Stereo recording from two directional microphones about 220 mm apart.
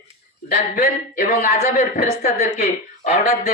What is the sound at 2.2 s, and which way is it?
A woman's voice, 30° left (ahead or behind).